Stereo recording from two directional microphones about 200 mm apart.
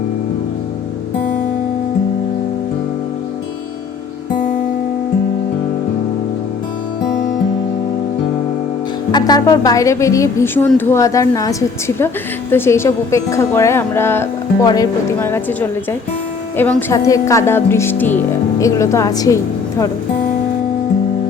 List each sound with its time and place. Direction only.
9.1 s a woman's voice: 20° left (ahead or behind)